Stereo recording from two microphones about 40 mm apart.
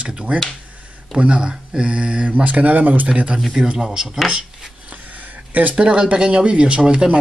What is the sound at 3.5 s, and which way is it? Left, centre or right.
Speech, centre.